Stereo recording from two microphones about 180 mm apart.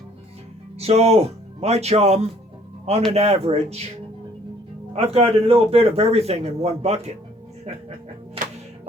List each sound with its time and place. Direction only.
0.8 s a man's voice: 35° right (ahead or behind)
4.9 s a man's voice: 35° right (ahead or behind)